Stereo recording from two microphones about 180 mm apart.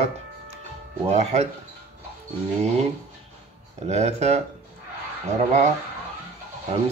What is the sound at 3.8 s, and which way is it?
Speech, 35° right (ahead or behind).